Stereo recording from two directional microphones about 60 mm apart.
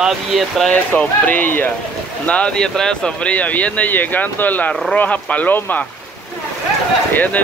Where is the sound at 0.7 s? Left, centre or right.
Left.